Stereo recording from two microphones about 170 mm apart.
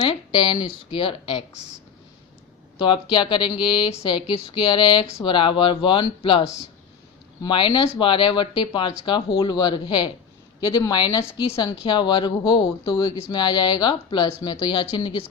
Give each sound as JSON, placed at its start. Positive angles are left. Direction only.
{"t": 0.0, "sound": "speech", "side_deg": 30}
{"t": 2.7, "sound": "speech", "side_deg": 30}
{"t": 7.4, "sound": "speech", "side_deg": 30}